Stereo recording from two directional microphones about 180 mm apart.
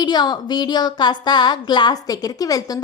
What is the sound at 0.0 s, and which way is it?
Speech, 25° left (ahead or behind).